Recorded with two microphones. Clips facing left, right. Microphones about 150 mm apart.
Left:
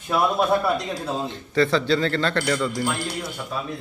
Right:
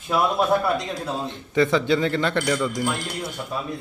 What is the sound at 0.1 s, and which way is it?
A man's voice, centre (ahead or behind).